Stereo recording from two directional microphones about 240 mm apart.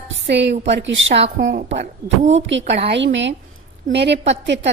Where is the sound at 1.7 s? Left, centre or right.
Right.